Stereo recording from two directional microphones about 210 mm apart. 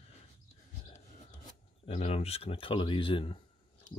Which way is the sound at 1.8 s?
30° left (ahead or behind).